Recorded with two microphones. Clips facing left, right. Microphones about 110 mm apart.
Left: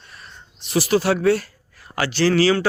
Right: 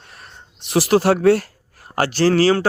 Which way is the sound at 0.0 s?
60° right (ahead or behind).